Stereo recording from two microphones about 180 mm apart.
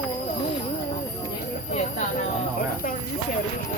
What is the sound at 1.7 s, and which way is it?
Speech, 45° left (ahead or behind).